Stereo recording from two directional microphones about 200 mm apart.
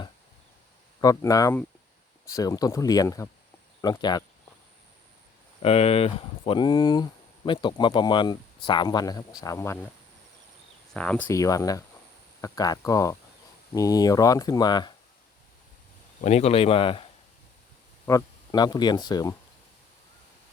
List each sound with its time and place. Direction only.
1.0 s speech: 15° left (ahead or behind)
5.6 s speech: 30° left (ahead or behind); by 9.9 s 10° left (ahead or behind)
10.9 s speech: 5° left (ahead or behind)
11.3 s speech: 15° left (ahead or behind)
16.2 s speech: 30° left (ahead or behind)